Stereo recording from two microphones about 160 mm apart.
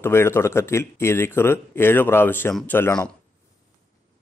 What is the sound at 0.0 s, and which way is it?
A man's voice, 15° left (ahead or behind).